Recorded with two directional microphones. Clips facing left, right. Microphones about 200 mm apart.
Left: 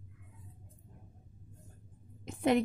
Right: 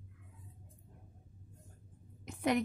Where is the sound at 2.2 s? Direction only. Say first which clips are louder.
Left 4 dB; 25° left (ahead or behind).